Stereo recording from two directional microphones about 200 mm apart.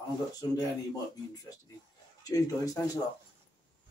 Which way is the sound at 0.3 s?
20° left (ahead or behind).